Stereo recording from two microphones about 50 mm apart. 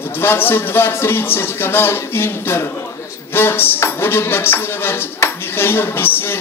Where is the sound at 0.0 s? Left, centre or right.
Left.